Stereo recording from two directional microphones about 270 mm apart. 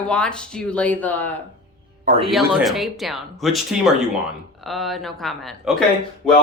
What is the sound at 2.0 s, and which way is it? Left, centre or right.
Speech, right.